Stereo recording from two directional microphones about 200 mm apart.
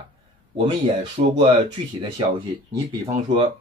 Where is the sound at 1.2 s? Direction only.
35° right (ahead or behind).